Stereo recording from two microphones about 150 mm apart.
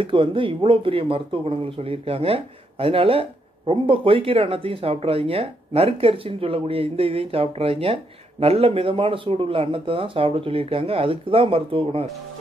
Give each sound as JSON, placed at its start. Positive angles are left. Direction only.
{"t": 0.0, "sound": "speech", "side_deg": -35}